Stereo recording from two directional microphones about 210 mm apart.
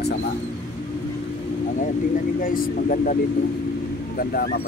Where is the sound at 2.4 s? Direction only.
40° left (ahead or behind).